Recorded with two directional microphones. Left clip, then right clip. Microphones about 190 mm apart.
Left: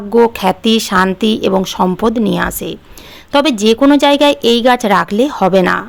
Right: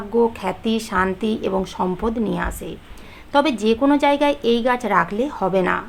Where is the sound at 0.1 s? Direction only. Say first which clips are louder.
Left 9 dB; 50° left (ahead or behind).